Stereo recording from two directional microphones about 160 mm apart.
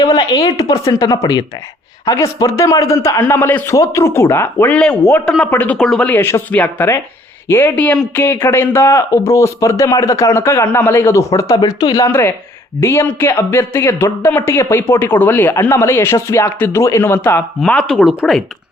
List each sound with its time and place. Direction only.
0.0 s a woman's voice: 25° left (ahead or behind); by 18.4 s centre (ahead or behind)